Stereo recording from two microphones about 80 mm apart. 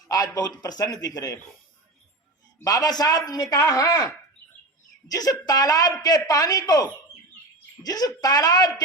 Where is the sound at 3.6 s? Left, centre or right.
Left.